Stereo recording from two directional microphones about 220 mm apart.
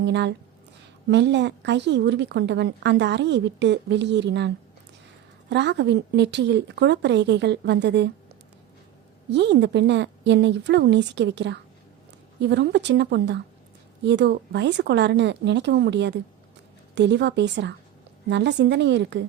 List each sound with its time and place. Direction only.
0.0 s a woman's voice: 50° right (ahead or behind)
9.3 s a woman's voice: 50° right (ahead or behind)